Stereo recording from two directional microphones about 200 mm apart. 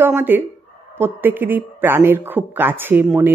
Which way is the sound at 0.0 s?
10° right (ahead or behind).